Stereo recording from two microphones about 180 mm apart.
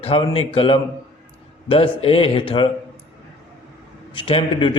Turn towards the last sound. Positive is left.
turn(degrees=30)  # may be behind; listen again after turning